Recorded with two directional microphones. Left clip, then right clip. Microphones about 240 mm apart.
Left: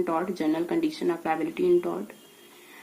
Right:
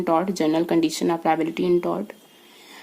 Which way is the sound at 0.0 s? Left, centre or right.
Right.